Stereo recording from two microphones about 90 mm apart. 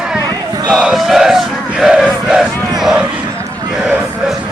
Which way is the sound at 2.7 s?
5° right (ahead or behind).